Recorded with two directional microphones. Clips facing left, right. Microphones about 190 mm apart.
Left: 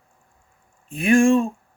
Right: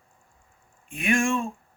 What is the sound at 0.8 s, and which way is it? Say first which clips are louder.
Speech: left 8 dB; 35° left (ahead or behind).